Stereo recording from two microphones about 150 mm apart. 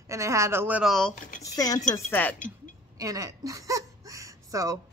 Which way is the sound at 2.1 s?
10° left (ahead or behind).